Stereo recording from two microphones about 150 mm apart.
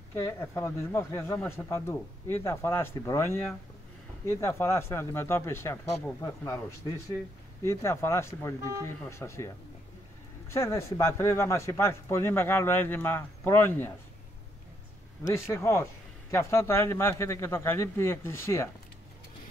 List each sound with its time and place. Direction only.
0.1 s speech: 15° left (ahead or behind)
10.5 s speech: 20° left (ahead or behind)
15.2 s speech: 20° left (ahead or behind)